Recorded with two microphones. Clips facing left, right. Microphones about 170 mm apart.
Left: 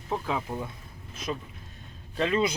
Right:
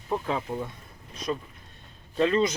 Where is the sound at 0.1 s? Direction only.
5° left (ahead or behind).